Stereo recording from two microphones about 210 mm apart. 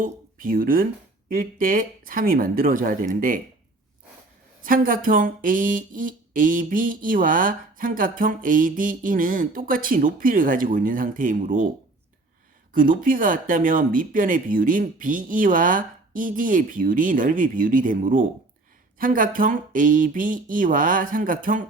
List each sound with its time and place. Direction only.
0.0 s speech: 40° right (ahead or behind)
4.6 s speech: 40° right (ahead or behind)
12.7 s speech: 40° right (ahead or behind)